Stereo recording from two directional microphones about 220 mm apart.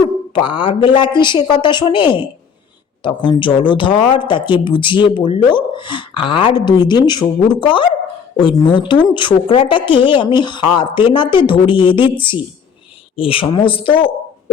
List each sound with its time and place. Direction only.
0.3 s speech: 20° left (ahead or behind)
13.1 s speech: 25° left (ahead or behind)